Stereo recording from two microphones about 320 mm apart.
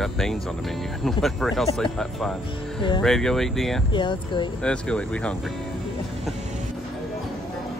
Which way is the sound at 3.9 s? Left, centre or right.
Centre.